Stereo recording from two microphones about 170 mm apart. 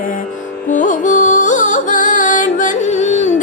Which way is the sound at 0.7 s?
50° left (ahead or behind).